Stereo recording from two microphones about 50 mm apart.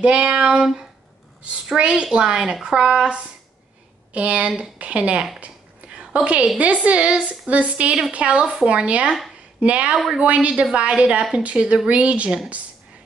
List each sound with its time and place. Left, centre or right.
0.0 s a woman's voice: right